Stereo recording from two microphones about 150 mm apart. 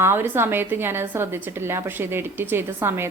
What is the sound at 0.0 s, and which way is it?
A woman's voice, 15° right (ahead or behind).